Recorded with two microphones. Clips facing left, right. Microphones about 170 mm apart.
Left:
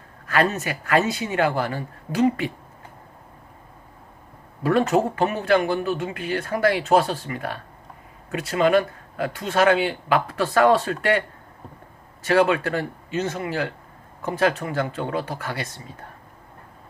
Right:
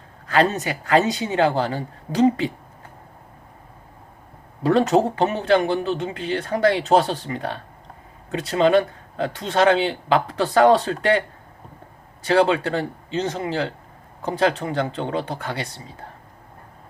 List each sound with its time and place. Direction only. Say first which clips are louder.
0.3 s speech: right 2 dB; 20° right (ahead or behind)
4.9 s speech: right 2 dB; 20° right (ahead or behind)
12.2 s speech: right 1 dB; 20° right (ahead or behind)